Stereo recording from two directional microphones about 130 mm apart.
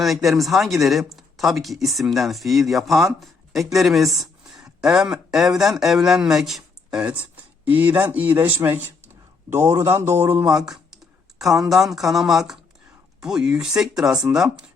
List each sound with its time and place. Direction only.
0.0 s speech: centre (ahead or behind)